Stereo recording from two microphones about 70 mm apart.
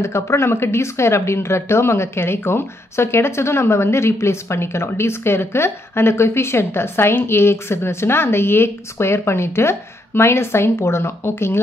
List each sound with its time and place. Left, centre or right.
0.0 s speech: left